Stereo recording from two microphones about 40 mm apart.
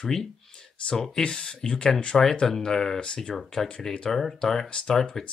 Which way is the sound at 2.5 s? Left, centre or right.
Centre.